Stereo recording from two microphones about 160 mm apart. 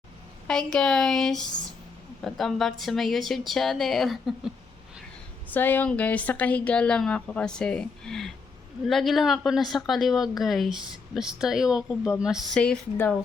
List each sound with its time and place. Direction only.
0.4 s a woman's voice: 5° left (ahead or behind)
5.5 s a woman's voice: 10° left (ahead or behind)